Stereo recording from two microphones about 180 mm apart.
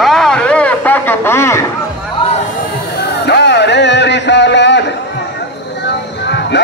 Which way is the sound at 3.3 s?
70° left (ahead or behind).